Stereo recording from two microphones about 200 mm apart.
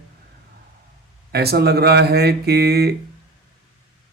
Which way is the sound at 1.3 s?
55° right (ahead or behind).